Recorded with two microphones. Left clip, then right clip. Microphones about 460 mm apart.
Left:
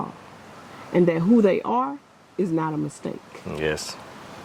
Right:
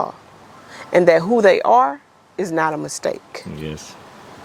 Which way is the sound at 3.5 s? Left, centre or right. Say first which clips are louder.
Left 9 dB; left.